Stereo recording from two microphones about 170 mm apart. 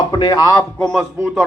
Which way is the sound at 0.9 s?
Centre (ahead or behind).